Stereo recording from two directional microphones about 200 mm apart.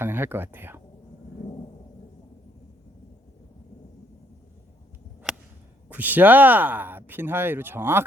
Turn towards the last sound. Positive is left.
turn(degrees=-10)  # may be behind; listen again after turning